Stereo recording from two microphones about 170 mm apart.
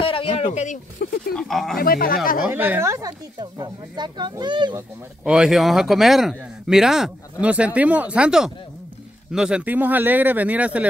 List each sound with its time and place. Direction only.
0.0 s speech: 35° left (ahead or behind)
1.0 s speech: 65° left (ahead or behind)
1.3 s speech: centre (ahead or behind)
1.8 s speech: 60° left (ahead or behind)
2.4 s speech: 10° right (ahead or behind); by 4.8 s 25° right (ahead or behind)
5.2 s speech: 5° right (ahead or behind)